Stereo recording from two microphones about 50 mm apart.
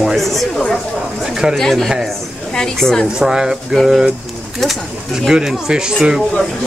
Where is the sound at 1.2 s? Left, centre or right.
Centre.